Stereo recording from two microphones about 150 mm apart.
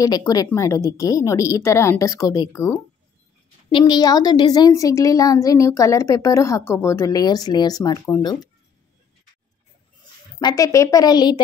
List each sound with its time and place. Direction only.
0.0 s a woman's voice: 25° left (ahead or behind)
10.4 s a woman's voice: 25° left (ahead or behind)